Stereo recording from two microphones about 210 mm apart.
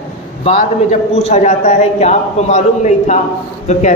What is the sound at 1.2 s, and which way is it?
A man's voice, 35° left (ahead or behind).